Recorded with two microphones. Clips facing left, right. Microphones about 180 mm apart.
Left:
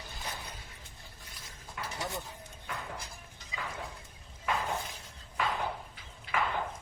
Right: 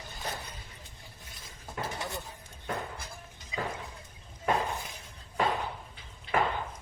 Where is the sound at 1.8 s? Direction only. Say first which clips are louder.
Right 5 dB; 35° right (ahead or behind).